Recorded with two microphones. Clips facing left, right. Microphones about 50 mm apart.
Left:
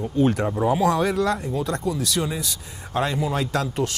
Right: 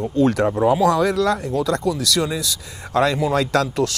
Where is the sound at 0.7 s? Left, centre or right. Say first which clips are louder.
Right 3 dB; right.